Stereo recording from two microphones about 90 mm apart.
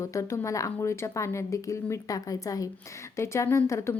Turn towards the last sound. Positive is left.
turn(degrees=30)  # may be behind; listen again after turning